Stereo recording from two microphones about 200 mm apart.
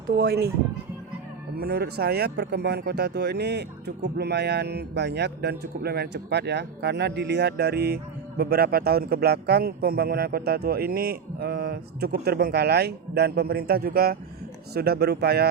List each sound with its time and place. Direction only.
0.2 s speech: 55° right (ahead or behind)
1.5 s speech: 50° right (ahead or behind)